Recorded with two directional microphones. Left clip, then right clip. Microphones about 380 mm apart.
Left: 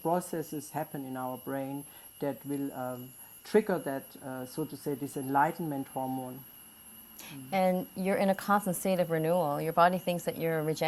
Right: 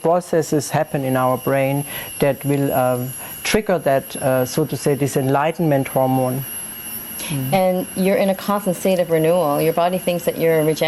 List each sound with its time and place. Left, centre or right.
0.1 s speech: right
4.8 s speech: right
7.2 s speech: left